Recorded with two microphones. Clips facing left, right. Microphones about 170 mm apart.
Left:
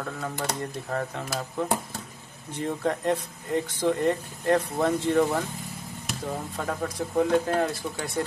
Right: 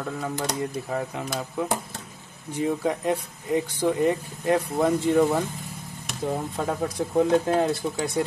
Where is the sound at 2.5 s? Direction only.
10° right (ahead or behind).